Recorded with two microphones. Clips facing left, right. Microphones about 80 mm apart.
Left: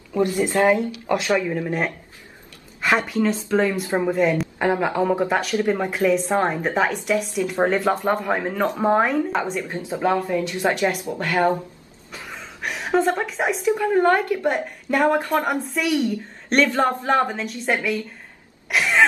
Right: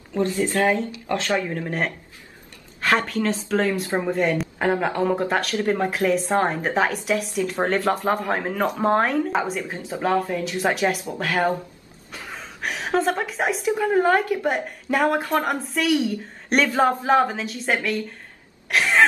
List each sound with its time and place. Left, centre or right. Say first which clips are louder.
0.2 s speech: left 2 dB; left
2.8 s a woman's voice: left 1 dB; centre
4.2 s a woman's voice: left 2 dB; centre
12.1 s a sound: even; centre
13.2 s a woman's voice: left 1 dB; centre
18.7 s cough: even; centre